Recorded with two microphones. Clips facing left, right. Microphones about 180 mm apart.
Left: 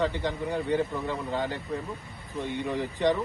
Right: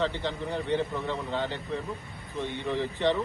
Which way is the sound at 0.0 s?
10° left (ahead or behind).